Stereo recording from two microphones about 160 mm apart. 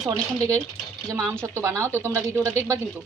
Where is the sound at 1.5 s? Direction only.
20° right (ahead or behind).